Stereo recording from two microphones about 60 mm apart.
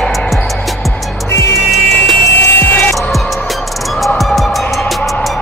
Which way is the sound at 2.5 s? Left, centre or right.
Left.